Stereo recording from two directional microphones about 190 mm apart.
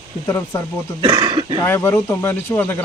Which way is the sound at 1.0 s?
25° right (ahead or behind).